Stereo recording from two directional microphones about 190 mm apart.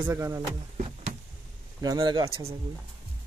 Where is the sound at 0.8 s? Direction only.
35° right (ahead or behind).